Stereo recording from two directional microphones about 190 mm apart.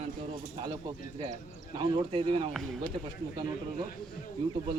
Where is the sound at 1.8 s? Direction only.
25° right (ahead or behind).